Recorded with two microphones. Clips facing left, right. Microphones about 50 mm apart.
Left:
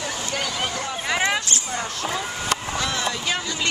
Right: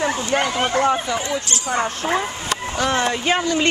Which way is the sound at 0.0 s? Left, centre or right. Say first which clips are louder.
Right 8 dB; right.